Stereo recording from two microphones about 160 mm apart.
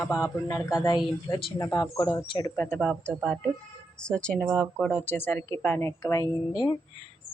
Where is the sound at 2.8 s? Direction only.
5° left (ahead or behind).